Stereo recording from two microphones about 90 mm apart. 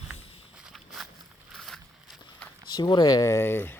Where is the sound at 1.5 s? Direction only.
Centre (ahead or behind).